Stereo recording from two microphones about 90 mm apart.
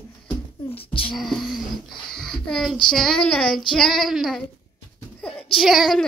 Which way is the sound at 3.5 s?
5° left (ahead or behind).